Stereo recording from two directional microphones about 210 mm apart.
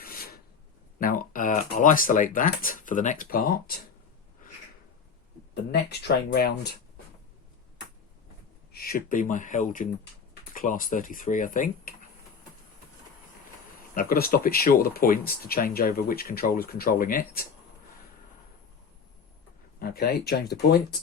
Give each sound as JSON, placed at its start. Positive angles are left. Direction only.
{"t": 0.0, "sound": "filing", "side_deg": 45}
{"t": 0.9, "sound": "speech", "side_deg": 40}
{"t": 5.7, "sound": "speech", "side_deg": 50}
{"t": 8.7, "sound": "speech", "side_deg": 45}
{"t": 13.9, "sound": "speech", "side_deg": 45}
{"t": 19.8, "sound": "speech", "side_deg": 45}